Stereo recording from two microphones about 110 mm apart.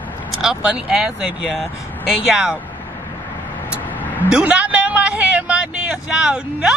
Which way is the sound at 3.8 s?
15° left (ahead or behind).